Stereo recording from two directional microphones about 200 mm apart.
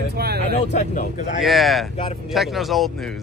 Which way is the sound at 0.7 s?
35° left (ahead or behind).